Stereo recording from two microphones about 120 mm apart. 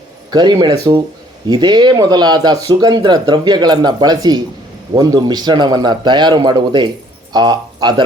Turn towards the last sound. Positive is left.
turn(degrees=-35)  # may be behind; listen again after turning